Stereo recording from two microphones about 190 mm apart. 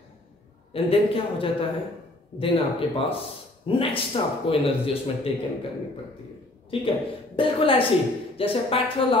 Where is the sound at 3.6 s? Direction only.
30° left (ahead or behind).